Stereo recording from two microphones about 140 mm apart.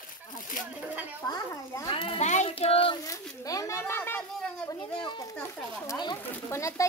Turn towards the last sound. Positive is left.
turn(degrees=20)  # may be behind; listen again after turning